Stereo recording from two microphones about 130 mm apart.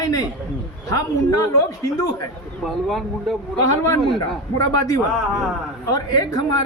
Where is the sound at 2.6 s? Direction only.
Centre (ahead or behind).